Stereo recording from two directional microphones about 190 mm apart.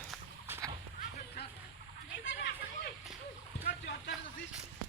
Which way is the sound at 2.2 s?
65° left (ahead or behind).